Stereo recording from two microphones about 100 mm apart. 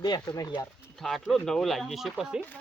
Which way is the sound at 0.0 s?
40° left (ahead or behind).